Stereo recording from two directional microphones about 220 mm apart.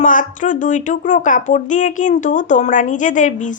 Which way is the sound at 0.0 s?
35° left (ahead or behind).